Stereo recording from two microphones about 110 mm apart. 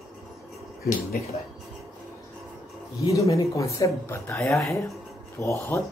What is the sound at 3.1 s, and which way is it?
Speech, 30° left (ahead or behind).